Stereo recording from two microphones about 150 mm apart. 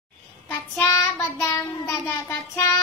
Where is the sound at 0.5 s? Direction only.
20° left (ahead or behind).